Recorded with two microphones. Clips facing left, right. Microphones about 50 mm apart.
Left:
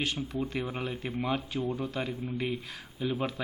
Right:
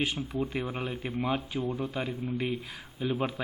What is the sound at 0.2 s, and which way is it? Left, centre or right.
A man's voice, centre.